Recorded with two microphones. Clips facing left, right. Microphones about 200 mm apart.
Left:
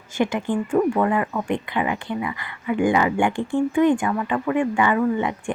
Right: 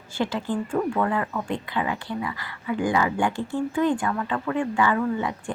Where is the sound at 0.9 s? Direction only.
15° left (ahead or behind).